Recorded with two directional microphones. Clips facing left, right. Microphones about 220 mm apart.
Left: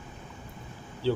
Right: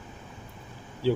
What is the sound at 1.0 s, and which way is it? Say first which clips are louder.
Speech: right 2 dB; 15° right (ahead or behind).